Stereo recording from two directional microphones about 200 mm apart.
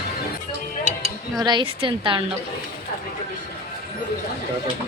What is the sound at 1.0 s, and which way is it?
Dishes, 20° right (ahead or behind).